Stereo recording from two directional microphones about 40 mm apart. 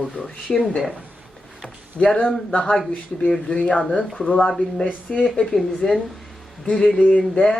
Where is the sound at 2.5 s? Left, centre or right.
Left.